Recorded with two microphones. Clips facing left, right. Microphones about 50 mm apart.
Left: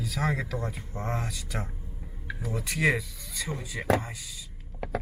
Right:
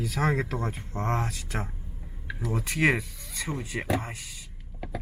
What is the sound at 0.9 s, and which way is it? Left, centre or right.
Speech, centre.